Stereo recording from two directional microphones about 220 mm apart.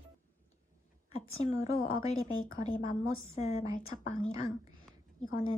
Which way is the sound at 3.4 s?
30° left (ahead or behind).